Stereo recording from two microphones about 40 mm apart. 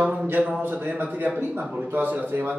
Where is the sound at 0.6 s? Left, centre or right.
Right.